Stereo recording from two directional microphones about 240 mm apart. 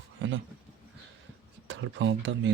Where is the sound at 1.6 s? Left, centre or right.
Right.